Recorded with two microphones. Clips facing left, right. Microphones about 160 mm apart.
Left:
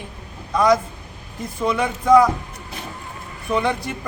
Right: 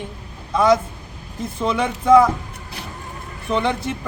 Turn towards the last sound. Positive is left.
turn(degrees=0)  # may be behind; listen again after turning